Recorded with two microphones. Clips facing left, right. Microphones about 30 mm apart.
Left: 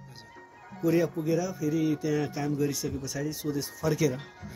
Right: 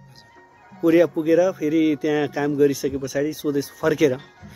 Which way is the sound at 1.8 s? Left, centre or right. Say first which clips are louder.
Right 8 dB; right.